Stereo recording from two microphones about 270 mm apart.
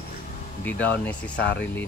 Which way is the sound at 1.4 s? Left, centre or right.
Left.